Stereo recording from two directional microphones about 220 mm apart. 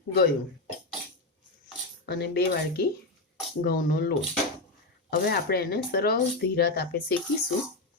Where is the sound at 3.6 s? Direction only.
40° left (ahead or behind).